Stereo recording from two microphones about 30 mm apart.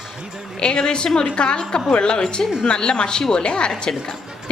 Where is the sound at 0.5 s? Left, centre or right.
Left.